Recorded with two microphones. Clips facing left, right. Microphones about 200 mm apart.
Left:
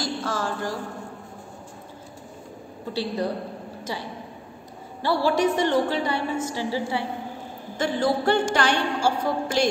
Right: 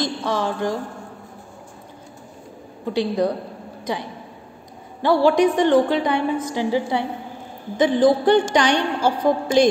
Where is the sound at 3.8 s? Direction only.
15° right (ahead or behind).